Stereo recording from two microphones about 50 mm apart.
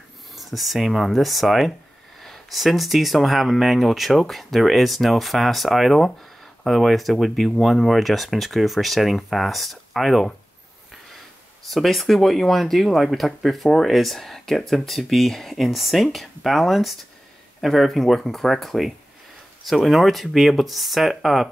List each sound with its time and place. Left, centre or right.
0.4 s speech: centre
11.7 s speech: centre